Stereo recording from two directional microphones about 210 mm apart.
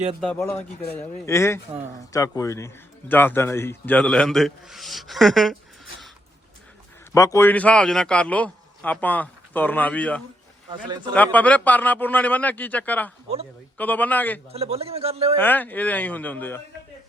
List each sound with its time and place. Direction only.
0.2 s speech: centre (ahead or behind)
0.4 s speech: 15° left (ahead or behind)
7.3 s speech: 10° left (ahead or behind)
10.7 s a man's voice: 20° right (ahead or behind)
11.1 s speech: 5° left (ahead or behind)
14.5 s a man's voice: 30° right (ahead or behind)
15.4 s speech: 10° left (ahead or behind)